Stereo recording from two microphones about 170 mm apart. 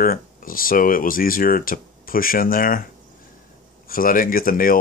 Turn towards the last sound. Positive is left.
turn(degrees=55)  # may be behind; listen again after turning